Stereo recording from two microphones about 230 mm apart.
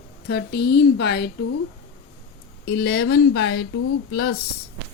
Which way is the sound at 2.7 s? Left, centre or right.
Left.